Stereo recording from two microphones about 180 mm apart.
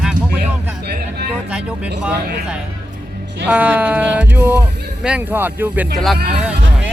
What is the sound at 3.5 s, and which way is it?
Speech, 10° right (ahead or behind).